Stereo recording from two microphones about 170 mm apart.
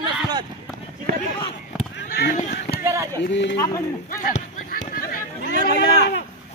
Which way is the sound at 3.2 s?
90° left.